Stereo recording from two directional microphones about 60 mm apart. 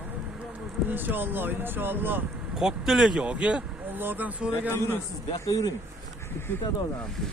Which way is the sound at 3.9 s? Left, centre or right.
Right.